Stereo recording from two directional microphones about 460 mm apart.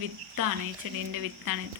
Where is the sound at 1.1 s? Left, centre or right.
Right.